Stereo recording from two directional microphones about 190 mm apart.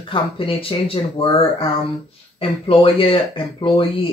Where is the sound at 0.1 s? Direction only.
30° left (ahead or behind).